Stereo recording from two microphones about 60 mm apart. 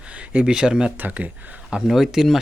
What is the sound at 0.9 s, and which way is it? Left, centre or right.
Speech, right.